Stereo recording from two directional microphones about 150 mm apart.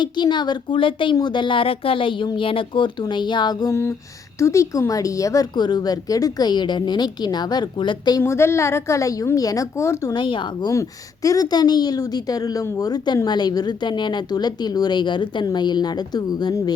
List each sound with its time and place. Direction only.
0.0 s a woman's voice: 30° left (ahead or behind)
8.2 s a woman's voice: 15° left (ahead or behind)